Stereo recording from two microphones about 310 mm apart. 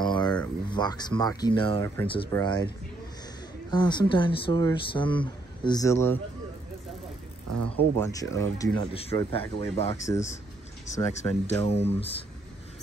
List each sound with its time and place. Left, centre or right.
0.0 s a sound: centre
0.7 s speech: centre
3.7 s speech: centre
7.4 s speech: right
8.1 s speech: centre